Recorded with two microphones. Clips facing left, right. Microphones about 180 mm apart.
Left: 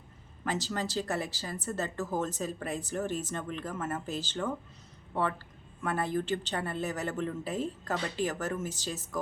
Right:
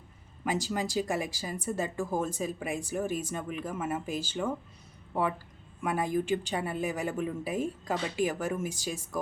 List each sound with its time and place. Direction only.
0.4 s speech: 10° right (ahead or behind)